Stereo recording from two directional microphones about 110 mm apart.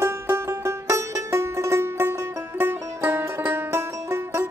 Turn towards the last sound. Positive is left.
turn(degrees=-25)  # may be behind; listen again after turning